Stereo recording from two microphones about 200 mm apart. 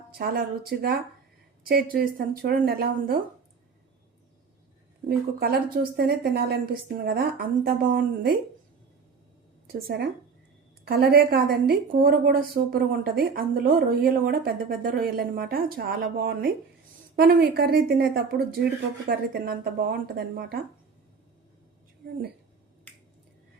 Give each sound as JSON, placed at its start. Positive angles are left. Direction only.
{"t": 0.1, "sound": "a woman's voice", "side_deg": -50}
{"t": 5.0, "sound": "a woman's voice", "side_deg": -50}
{"t": 9.6, "sound": "a woman's voice", "side_deg": -50}